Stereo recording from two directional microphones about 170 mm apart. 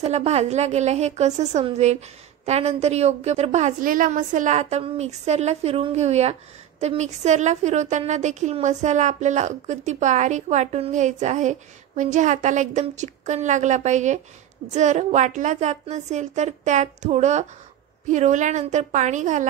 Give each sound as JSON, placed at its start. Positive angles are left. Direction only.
{"t": 0.0, "sound": "a woman's voice", "side_deg": -40}